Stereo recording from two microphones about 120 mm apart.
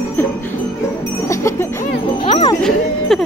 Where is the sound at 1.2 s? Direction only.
25° left (ahead or behind).